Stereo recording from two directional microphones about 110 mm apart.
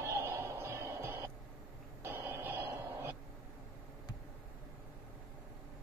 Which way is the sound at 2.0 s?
20° right (ahead or behind).